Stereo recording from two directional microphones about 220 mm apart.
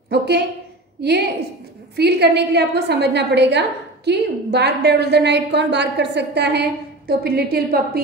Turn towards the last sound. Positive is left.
turn(degrees=-45)  # may be behind; listen again after turning